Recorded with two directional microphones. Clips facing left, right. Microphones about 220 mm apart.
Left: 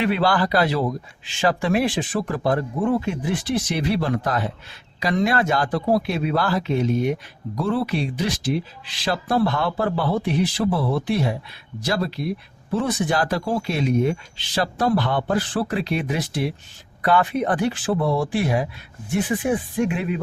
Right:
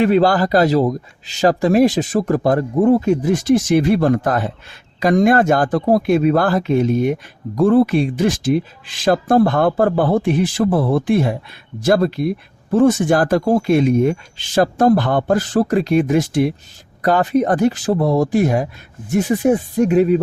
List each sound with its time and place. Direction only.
0.0 s speech: 45° right (ahead or behind)